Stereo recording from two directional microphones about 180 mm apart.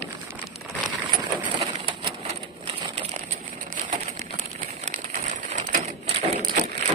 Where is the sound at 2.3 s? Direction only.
30° right (ahead or behind).